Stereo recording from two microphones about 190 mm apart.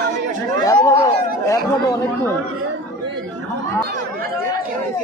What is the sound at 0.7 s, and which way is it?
Speech, 15° left (ahead or behind).